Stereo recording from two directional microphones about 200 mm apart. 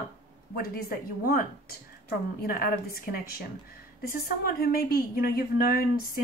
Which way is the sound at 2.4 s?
45° left (ahead or behind).